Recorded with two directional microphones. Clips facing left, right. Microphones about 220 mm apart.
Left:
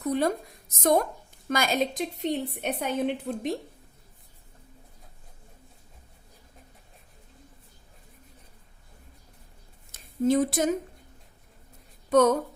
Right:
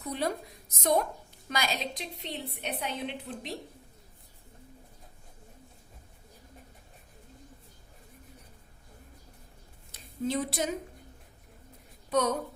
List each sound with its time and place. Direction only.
0.0 s a sound: 50° left (ahead or behind)
0.8 s a woman's voice: 50° left (ahead or behind)
9.9 s a woman's voice: 50° left (ahead or behind)
12.1 s a woman's voice: 50° left (ahead or behind)